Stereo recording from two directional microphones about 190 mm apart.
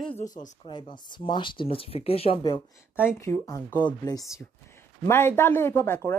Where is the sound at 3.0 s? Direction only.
10° left (ahead or behind).